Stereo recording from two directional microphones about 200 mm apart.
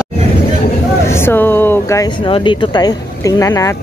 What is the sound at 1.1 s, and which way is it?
Speech, 10° left (ahead or behind).